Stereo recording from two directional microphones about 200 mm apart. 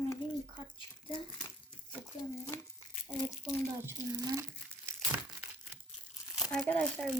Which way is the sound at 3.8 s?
15° right (ahead or behind).